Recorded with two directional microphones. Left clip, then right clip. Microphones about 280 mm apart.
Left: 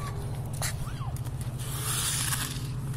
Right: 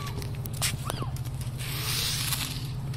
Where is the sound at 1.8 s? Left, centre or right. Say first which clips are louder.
Right 2 dB; left.